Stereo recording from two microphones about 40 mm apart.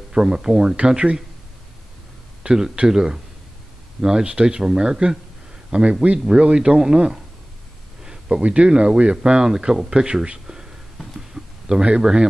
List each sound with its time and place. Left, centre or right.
0.1 s speech: centre
2.4 s a man's voice: centre
8.0 s a sound: centre
8.4 s speech: right
11.1 s a sound: centre
12.0 s speech: centre